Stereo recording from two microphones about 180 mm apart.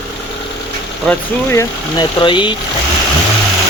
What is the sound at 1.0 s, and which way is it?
Speech, 10° left (ahead or behind).